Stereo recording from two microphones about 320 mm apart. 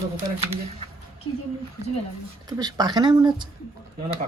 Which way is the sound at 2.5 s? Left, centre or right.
Centre.